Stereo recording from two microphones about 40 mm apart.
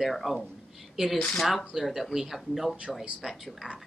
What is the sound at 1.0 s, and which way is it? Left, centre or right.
Speech, centre.